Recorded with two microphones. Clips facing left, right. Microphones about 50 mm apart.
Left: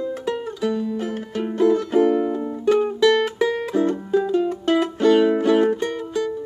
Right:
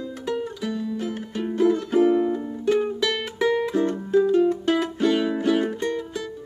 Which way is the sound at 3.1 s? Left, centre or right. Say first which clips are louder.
Left 5 dB; centre.